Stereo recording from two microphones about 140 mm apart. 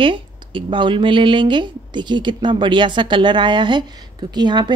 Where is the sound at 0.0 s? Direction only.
35° right (ahead or behind).